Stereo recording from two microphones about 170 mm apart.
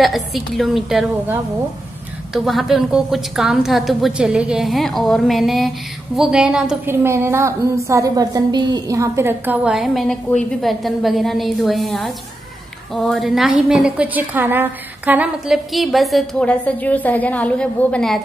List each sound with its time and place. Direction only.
0.0 s a woman's voice: centre (ahead or behind)
9.7 s a woman's voice: centre (ahead or behind)